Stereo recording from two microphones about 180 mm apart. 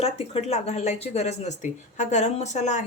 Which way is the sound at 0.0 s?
35° left (ahead or behind).